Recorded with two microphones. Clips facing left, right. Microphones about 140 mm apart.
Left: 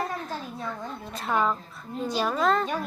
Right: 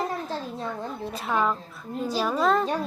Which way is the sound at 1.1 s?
Centre (ahead or behind).